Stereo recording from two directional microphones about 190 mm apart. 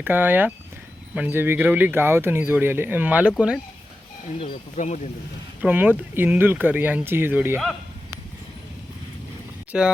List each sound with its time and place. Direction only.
0.0 s speech: 10° right (ahead or behind)
4.4 s speech: 40° left (ahead or behind)
5.6 s speech: 10° right (ahead or behind)
9.7 s speech: 5° right (ahead or behind)